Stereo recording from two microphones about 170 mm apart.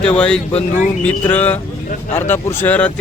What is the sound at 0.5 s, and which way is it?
Speech, 45° left (ahead or behind).